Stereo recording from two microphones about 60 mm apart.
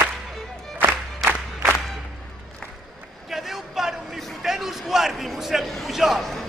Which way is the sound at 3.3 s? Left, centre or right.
Centre.